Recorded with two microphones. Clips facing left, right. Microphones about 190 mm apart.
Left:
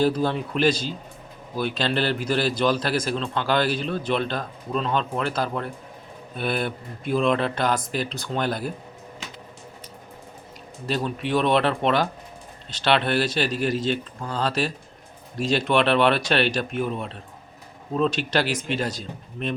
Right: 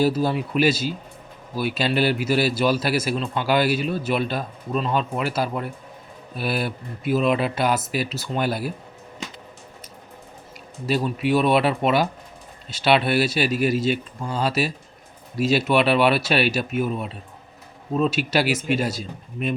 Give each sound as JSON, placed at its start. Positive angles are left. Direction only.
{"t": 0.0, "sound": "a man's voice", "side_deg": -10}
{"t": 10.8, "sound": "a man's voice", "side_deg": -10}